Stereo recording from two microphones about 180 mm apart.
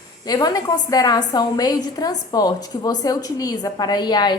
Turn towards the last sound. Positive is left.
turn(degrees=25)  # may be behind; listen again after turning